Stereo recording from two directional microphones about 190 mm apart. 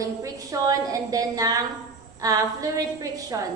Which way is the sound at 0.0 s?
15° right (ahead or behind).